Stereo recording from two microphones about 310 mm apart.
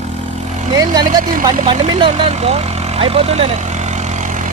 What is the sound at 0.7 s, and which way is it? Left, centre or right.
Speech, centre.